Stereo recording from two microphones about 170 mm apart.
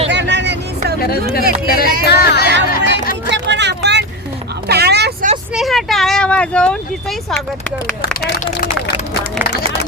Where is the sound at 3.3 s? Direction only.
90° right.